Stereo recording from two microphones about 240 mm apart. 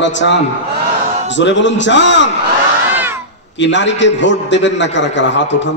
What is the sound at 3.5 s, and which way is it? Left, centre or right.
A man's voice, left.